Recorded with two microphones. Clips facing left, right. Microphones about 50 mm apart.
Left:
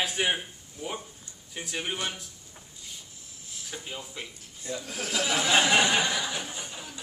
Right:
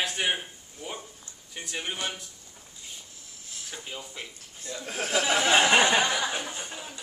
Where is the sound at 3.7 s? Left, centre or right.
Centre.